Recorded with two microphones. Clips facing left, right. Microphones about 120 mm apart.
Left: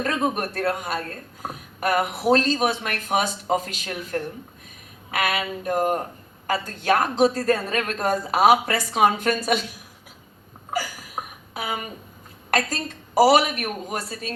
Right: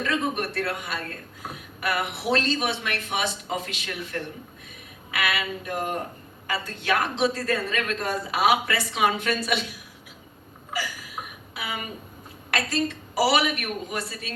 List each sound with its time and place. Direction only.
0.0 s a woman's voice: 40° left (ahead or behind)
10.7 s a sound: 45° left (ahead or behind)
12.5 s speech: 45° left (ahead or behind)